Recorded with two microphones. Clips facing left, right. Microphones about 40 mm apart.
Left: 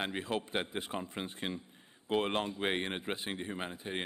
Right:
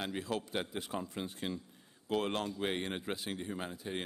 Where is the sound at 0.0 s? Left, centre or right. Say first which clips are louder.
Left 2 dB; left.